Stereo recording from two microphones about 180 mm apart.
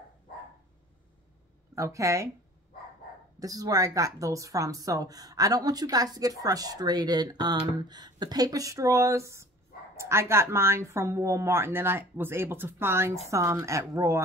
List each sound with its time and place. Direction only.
1.8 s speech: 15° right (ahead or behind)
3.3 s a woman's voice: 20° right (ahead or behind)